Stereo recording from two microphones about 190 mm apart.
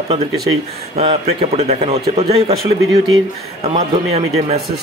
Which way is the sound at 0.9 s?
35° right (ahead or behind).